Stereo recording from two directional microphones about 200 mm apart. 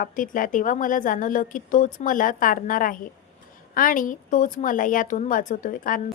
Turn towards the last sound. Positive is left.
turn(degrees=40)  # may be behind; listen again after turning